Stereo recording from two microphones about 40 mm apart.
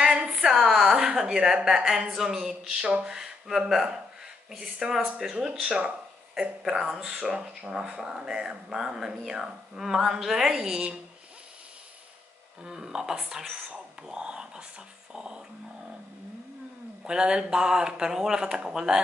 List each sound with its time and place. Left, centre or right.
0.0 s a sound: right
0.5 s a sound: centre
1.1 s a woman's voice: centre
3.2 s a woman's voice: centre
12.6 s a woman's voice: centre
14.0 s speech: right
15.1 s dog: right
17.0 s speech: right